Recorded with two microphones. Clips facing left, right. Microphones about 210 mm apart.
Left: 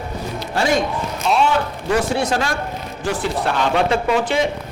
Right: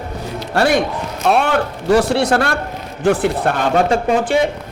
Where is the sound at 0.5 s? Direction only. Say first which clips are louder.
Right 3 dB; 65° right (ahead or behind).